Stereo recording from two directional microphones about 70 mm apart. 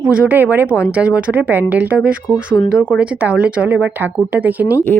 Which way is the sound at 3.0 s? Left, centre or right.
Centre.